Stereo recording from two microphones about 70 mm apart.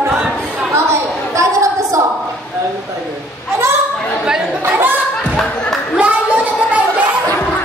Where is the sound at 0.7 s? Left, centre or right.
Right.